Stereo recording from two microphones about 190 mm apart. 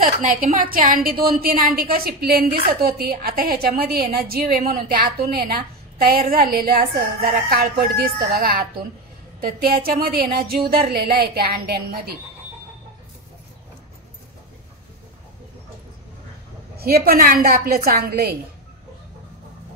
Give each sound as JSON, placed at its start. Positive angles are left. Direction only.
{"t": 0.0, "sound": "a woman's voice", "side_deg": -45}
{"t": 16.7, "sound": "a woman's voice", "side_deg": -55}